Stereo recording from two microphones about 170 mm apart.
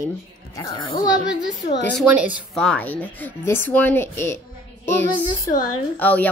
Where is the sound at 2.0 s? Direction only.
10° right (ahead or behind).